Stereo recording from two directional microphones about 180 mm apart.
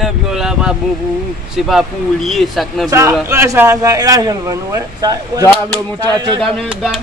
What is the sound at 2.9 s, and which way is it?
Speech, 15° right (ahead or behind).